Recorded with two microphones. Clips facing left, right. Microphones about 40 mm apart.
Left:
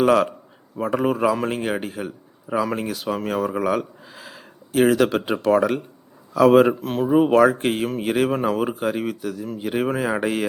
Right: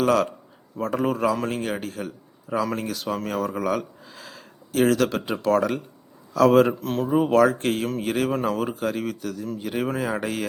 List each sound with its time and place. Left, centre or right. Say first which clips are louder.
0.0 s a man's voice: left 3 dB; centre